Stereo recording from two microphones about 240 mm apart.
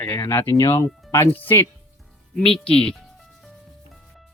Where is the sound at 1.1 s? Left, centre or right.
Centre.